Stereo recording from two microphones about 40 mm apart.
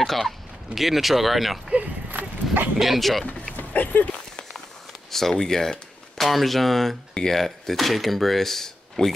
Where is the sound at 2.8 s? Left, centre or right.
Centre.